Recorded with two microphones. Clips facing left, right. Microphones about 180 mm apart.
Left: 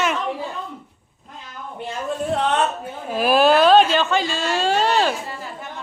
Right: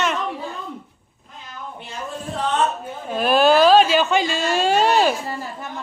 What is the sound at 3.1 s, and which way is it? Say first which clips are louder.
Speech: even; 5° left (ahead or behind).